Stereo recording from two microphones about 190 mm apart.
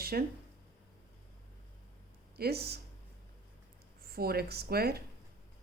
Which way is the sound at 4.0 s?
55° right (ahead or behind).